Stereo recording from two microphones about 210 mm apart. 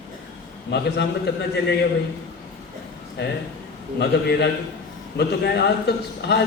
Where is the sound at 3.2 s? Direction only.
55° left (ahead or behind).